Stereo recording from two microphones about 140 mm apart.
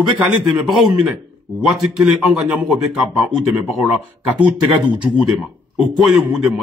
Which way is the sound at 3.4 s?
Centre (ahead or behind).